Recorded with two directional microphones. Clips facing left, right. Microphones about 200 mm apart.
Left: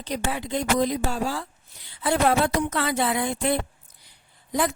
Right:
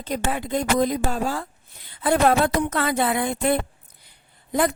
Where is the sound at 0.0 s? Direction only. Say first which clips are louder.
Right 2 dB; 50° right (ahead or behind).